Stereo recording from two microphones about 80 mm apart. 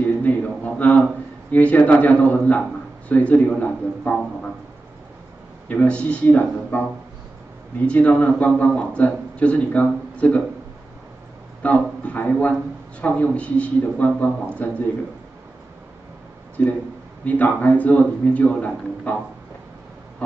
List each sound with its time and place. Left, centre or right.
0.0 s a sound: centre
1.5 s a man's voice: centre
5.7 s a man's voice: centre
7.8 s a man's voice: centre
11.6 s a man's voice: centre
16.6 s a man's voice: centre